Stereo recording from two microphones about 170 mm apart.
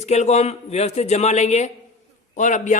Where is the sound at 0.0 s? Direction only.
40° left (ahead or behind).